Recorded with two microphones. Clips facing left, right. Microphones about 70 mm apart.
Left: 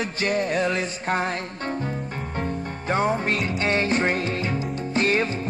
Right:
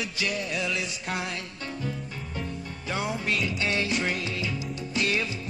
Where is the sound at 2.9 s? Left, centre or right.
Left.